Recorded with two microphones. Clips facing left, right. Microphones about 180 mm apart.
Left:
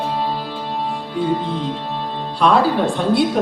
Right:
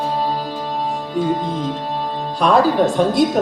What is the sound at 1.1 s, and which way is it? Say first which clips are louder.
A woman's voice: even; 45° right (ahead or behind).